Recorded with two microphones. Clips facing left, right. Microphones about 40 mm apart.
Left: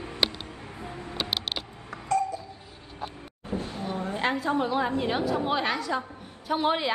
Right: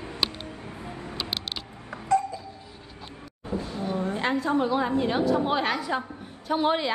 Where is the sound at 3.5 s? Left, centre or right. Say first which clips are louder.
Right 1 dB; left.